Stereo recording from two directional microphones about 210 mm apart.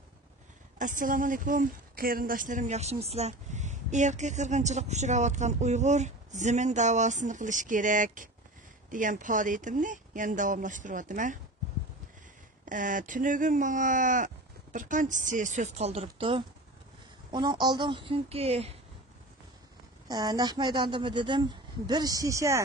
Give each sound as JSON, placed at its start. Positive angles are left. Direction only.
{"t": 0.7, "sound": "a woman's voice", "side_deg": -40}
{"t": 12.6, "sound": "a woman's voice", "side_deg": -40}
{"t": 20.1, "sound": "speech", "side_deg": -20}